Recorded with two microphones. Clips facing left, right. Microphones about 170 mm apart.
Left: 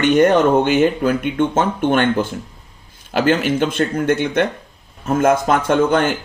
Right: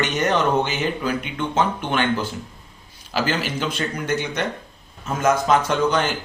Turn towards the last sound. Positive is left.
turn(degrees=50)  # may be behind; listen again after turning